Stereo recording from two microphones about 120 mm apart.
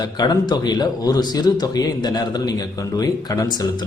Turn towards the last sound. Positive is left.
turn(degrees=35)  # may be behind; listen again after turning